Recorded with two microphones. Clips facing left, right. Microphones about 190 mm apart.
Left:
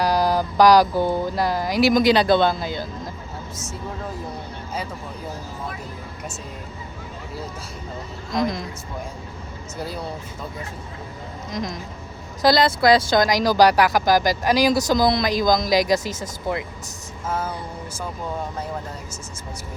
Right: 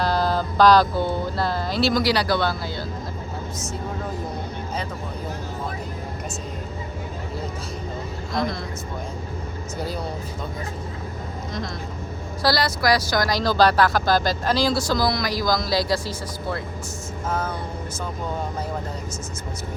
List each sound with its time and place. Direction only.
0.0 s speech: 15° left (ahead or behind)
8.3 s speech: 15° left (ahead or behind)
11.5 s speech: 15° left (ahead or behind)